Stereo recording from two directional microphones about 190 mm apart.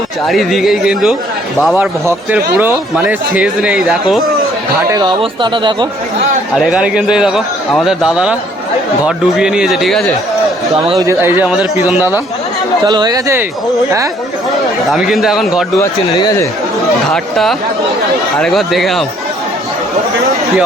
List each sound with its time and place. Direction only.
0.3 s a man's voice: centre (ahead or behind)
4.9 s speech: 25° right (ahead or behind)
6.6 s a man's voice: 5° right (ahead or behind)
11.0 s speech: 15° right (ahead or behind)
12.8 s speech: 20° right (ahead or behind)
14.9 s a man's voice: centre (ahead or behind)
15.8 s speech: 20° left (ahead or behind)
17.1 s a man's voice: centre (ahead or behind)